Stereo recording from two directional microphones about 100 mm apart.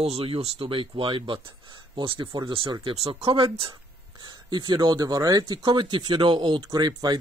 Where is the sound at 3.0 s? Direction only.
70° right (ahead or behind).